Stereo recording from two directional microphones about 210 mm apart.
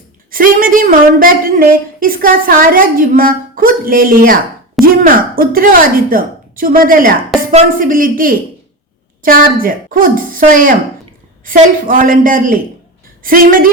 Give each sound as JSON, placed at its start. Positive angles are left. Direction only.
{"t": 0.3, "sound": "a woman's voice", "side_deg": -40}
{"t": 4.8, "sound": "a sound", "side_deg": 0}
{"t": 5.4, "sound": "a woman's voice", "side_deg": -45}